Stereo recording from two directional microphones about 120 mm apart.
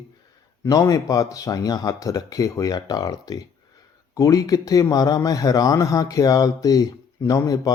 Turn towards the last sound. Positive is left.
turn(degrees=30)  # may be behind; listen again after turning